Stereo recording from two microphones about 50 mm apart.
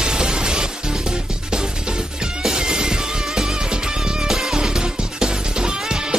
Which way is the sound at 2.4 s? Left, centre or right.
Centre.